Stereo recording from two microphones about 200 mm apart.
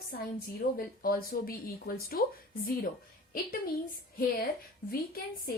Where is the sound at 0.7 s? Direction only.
45° left (ahead or behind).